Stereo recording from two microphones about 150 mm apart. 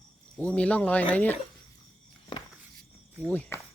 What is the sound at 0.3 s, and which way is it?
Speech, 10° left (ahead or behind).